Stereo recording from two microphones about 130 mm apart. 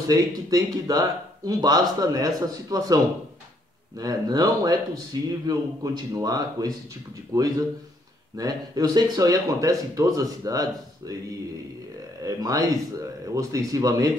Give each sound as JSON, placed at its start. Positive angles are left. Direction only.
{"t": 0.0, "sound": "speech", "side_deg": -30}
{"t": 4.0, "sound": "speech", "side_deg": -30}
{"t": 12.2, "sound": "speech", "side_deg": -25}